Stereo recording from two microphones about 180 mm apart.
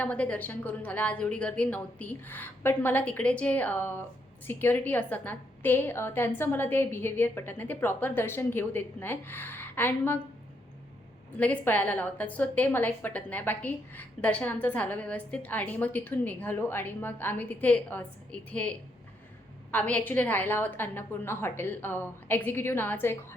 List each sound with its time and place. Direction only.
0.0 s a woman's voice: 10° left (ahead or behind)
11.3 s a woman's voice: 10° left (ahead or behind)
19.7 s a woman's voice: 10° left (ahead or behind)